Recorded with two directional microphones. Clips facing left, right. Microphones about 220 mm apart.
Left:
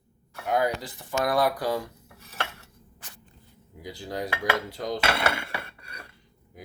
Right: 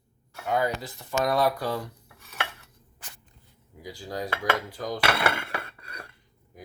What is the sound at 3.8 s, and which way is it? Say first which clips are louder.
Dishes: left 1 dB; 20° left (ahead or behind).